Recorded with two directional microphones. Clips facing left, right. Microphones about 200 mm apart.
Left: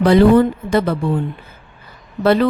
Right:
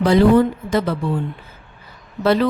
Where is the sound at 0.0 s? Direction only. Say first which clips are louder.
Left 2 dB; 60° left (ahead or behind).